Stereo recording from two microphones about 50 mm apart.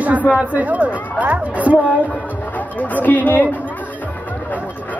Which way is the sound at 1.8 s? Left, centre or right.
Left.